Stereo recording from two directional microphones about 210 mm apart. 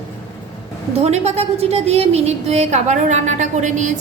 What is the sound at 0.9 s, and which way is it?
A woman's voice, 30° right (ahead or behind).